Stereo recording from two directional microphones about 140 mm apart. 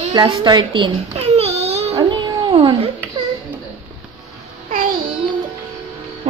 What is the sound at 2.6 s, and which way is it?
Speech, 45° right (ahead or behind).